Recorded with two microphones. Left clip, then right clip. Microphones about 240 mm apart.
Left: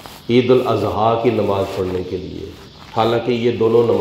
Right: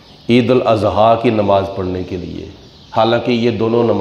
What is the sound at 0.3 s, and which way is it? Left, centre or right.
A man's voice, right.